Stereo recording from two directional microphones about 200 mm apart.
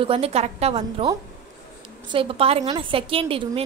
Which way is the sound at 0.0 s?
30° right (ahead or behind).